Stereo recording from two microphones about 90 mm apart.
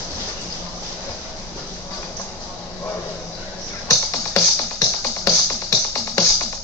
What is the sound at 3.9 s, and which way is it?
Music, 25° left (ahead or behind).